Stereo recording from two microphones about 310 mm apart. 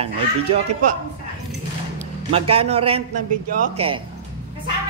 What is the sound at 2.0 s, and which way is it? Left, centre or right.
Speech, centre.